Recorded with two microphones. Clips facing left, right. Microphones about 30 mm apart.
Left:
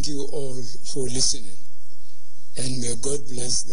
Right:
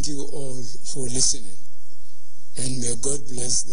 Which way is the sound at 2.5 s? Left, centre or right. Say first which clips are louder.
Left 1 dB; centre.